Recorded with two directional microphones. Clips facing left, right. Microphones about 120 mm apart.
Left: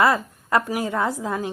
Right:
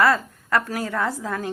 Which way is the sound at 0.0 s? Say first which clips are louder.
Even; 20° left (ahead or behind).